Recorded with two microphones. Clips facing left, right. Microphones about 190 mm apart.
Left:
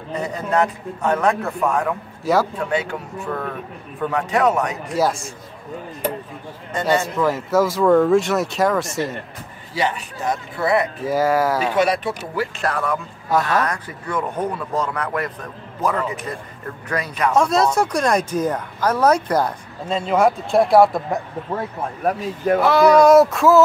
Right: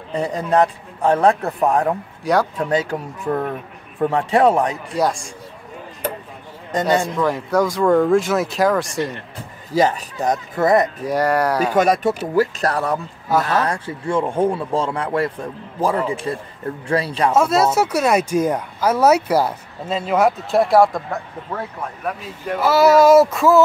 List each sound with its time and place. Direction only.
0.1 s a man's voice: 35° right (ahead or behind)
2.3 s speech: 5° left (ahead or behind)
2.7 s a man's voice: 35° right (ahead or behind)
4.9 s speech: 5° left (ahead or behind)
6.9 s speech: 5° left (ahead or behind)
9.7 s a man's voice: 40° right (ahead or behind)
11.1 s speech: centre (ahead or behind)
11.7 s speech: 45° right (ahead or behind)
13.3 s speech: centre (ahead or behind)
13.6 s speech: 30° right (ahead or behind)
17.3 s speech: 5° right (ahead or behind)
22.6 s speech: 5° right (ahead or behind)